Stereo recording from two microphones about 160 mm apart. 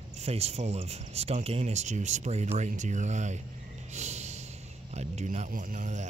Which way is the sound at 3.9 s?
45° right (ahead or behind).